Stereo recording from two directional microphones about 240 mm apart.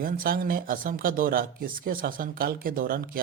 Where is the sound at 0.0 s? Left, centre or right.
Right.